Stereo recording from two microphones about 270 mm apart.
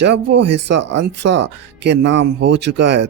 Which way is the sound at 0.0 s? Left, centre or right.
Right.